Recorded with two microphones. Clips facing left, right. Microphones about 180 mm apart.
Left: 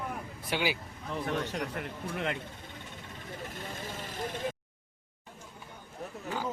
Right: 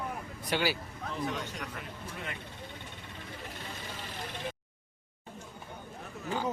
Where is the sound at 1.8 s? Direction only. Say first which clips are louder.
Left 7 dB; 65° left (ahead or behind).